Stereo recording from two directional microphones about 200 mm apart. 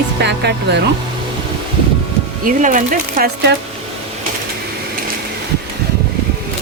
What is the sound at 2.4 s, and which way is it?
Speech, 40° right (ahead or behind).